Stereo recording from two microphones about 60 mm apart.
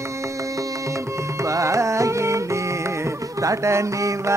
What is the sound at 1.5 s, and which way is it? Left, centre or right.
Music, right.